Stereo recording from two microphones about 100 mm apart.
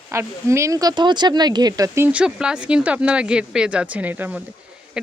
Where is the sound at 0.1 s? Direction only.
25° right (ahead or behind).